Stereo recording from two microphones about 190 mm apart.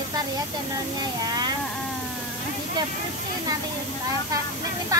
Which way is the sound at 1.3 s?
20° right (ahead or behind).